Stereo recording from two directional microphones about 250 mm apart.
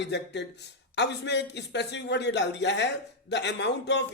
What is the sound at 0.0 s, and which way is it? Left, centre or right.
Speech, left.